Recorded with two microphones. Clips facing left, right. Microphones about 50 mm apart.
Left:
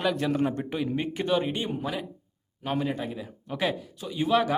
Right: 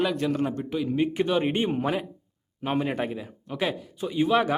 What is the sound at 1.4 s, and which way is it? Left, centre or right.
Speech, right.